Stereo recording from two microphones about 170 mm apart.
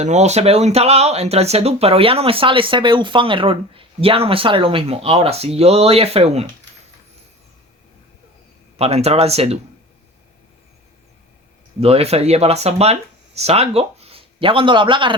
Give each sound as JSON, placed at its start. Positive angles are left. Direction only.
{"t": 0.0, "sound": "speech", "side_deg": -40}
{"t": 8.8, "sound": "speech", "side_deg": -40}
{"t": 11.8, "sound": "speech", "side_deg": -35}